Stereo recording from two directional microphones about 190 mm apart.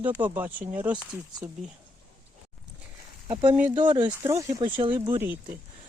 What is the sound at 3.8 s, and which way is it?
Speech, 25° right (ahead or behind).